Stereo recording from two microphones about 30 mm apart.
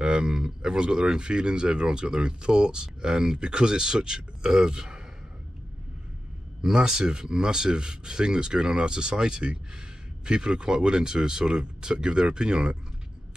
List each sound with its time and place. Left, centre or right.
0.0 s speech: right
6.6 s speech: centre